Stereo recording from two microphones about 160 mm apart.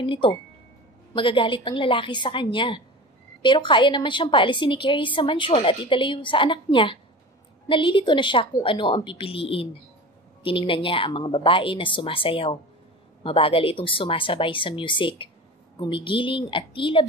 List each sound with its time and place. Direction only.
0.0 s a woman's voice: 35° left (ahead or behind)